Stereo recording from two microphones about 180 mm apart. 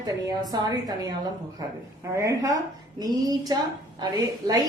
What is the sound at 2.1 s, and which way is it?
A woman's voice, 20° right (ahead or behind).